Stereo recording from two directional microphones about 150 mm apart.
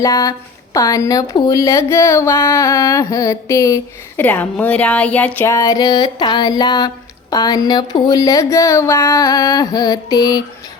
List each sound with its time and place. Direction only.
0.0 s speech: 25° left (ahead or behind)